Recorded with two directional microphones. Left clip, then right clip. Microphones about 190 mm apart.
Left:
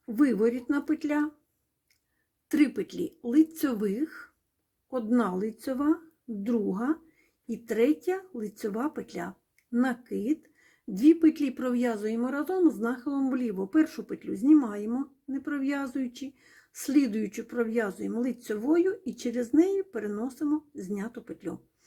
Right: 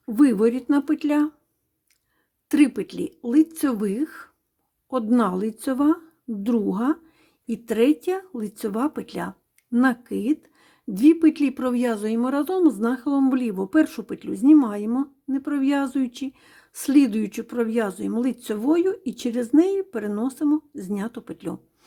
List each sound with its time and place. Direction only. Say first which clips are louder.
0.0 s speech: right 6 dB; 30° right (ahead or behind)
2.5 s a woman's voice: right 6 dB; 30° right (ahead or behind)